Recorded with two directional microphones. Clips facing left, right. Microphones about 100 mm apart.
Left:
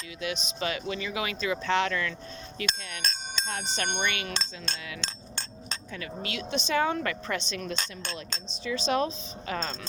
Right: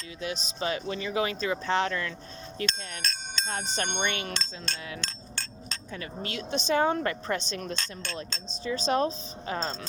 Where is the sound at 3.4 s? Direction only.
40° right (ahead or behind).